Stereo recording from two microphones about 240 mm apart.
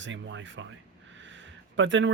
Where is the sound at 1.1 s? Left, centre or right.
Right.